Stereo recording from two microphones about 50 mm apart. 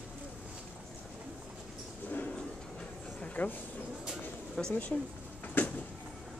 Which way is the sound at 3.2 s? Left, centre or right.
Left.